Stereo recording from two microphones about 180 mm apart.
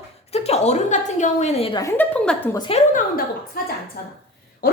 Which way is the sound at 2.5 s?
25° left (ahead or behind).